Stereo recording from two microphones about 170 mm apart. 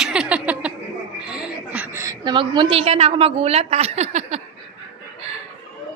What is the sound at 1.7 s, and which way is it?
A woman's voice, 15° right (ahead or behind).